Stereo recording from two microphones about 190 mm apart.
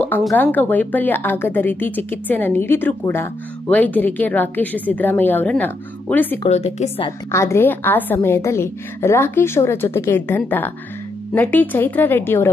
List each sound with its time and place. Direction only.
0.0 s a woman's voice: 5° left (ahead or behind)
6.5 s a woman's voice: 35° left (ahead or behind)
7.1 s a woman's voice: 15° left (ahead or behind)